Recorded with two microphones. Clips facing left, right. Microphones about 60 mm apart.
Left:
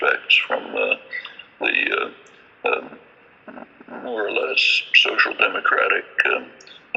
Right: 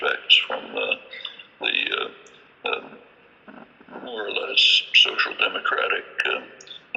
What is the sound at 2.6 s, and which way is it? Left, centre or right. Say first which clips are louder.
Burping: left 6 dB; left.